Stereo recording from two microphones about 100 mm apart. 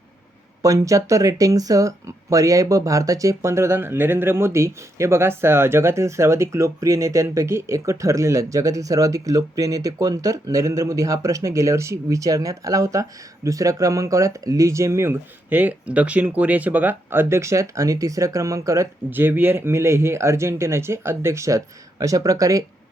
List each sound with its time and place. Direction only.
0.6 s speech: 35° right (ahead or behind)
19.1 s speech: 20° right (ahead or behind)